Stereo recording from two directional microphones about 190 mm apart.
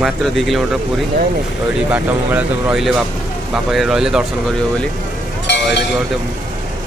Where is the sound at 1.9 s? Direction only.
5° right (ahead or behind).